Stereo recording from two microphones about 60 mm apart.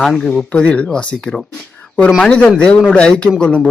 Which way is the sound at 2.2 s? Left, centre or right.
Centre.